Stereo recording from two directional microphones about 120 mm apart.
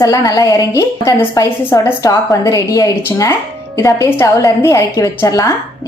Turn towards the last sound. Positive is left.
turn(degrees=25)  # may be behind; listen again after turning